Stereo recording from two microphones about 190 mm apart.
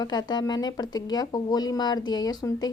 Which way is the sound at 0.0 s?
20° left (ahead or behind).